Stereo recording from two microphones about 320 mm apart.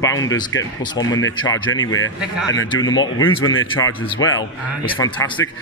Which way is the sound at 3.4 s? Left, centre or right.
Left.